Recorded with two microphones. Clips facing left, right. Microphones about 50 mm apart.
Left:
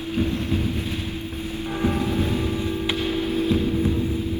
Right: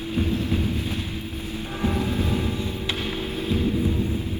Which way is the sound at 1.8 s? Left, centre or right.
Left.